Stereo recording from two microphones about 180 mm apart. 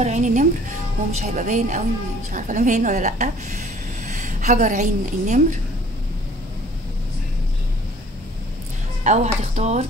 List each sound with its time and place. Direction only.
0.0 s a woman's voice: 40° right (ahead or behind)
9.0 s speech: 40° right (ahead or behind)